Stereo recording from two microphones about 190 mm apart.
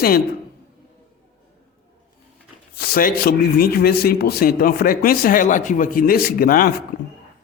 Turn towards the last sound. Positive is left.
turn(degrees=50)  # may be behind; listen again after turning